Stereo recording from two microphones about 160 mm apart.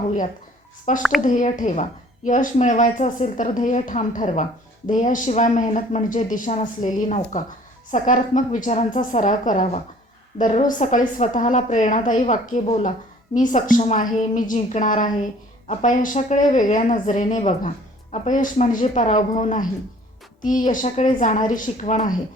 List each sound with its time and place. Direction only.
0.9 s a woman's voice: 50° left (ahead or behind)